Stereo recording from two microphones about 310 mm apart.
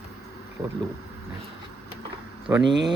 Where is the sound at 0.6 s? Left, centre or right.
Centre.